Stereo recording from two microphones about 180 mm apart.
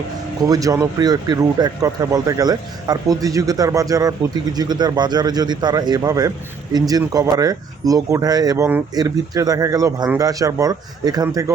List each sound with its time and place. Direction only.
0.4 s speech: 20° right (ahead or behind)